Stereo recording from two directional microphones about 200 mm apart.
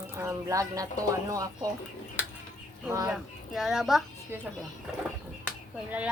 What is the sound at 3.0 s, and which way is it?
A woman's voice, centre (ahead or behind).